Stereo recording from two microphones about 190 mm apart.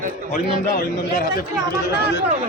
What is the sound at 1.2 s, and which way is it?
Speech, 60° left (ahead or behind).